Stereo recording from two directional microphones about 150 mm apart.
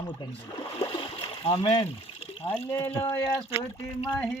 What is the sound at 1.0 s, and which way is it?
Splash, 35° left (ahead or behind).